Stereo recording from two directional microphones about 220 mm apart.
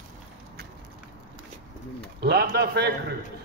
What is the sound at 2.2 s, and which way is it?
Speech, 45° right (ahead or behind).